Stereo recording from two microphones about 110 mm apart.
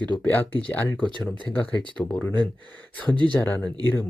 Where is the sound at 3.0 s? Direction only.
45° right (ahead or behind).